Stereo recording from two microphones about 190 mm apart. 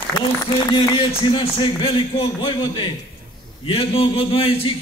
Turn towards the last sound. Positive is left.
turn(degrees=30)  # may be behind; listen again after turning